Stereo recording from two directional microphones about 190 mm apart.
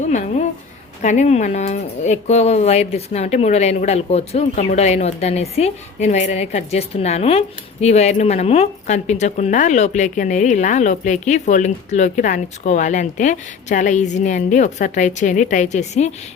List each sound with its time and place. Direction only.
0.0 s a woman's voice: 40° left (ahead or behind)